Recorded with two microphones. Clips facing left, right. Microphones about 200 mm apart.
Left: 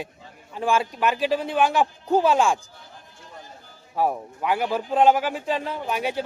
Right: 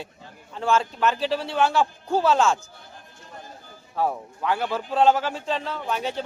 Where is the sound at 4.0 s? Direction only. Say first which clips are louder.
Left 2 dB; 15° left (ahead or behind).